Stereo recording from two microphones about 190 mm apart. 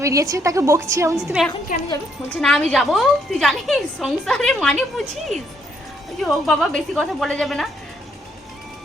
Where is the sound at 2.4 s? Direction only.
5° left (ahead or behind).